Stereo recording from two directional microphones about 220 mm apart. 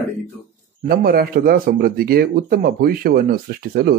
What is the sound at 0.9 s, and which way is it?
A man's voice, 40° right (ahead or behind).